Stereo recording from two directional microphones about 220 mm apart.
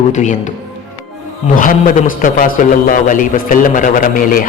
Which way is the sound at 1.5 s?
40° left (ahead or behind).